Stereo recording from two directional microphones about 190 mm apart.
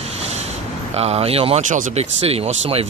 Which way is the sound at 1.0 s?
30° right (ahead or behind).